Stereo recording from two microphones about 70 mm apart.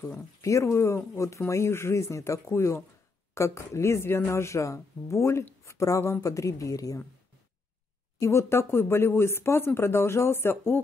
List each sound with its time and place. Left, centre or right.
0.4 s speech: left
8.2 s speech: left